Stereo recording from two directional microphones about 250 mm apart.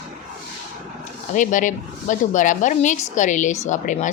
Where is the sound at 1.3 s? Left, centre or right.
Left.